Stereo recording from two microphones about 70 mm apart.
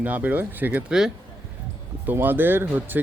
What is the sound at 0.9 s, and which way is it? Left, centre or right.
Speech, centre.